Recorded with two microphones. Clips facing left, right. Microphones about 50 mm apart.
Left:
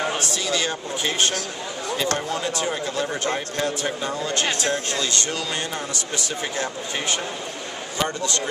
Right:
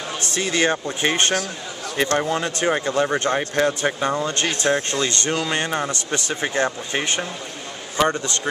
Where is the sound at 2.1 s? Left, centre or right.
Right.